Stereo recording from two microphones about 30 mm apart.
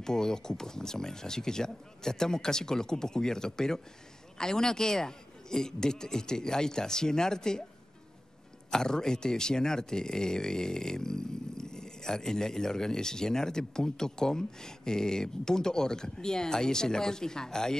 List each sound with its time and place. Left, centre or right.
0.0 s speech: left
8.6 s speech: left